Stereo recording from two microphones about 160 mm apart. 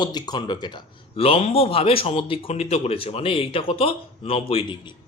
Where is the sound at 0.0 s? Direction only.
25° left (ahead or behind).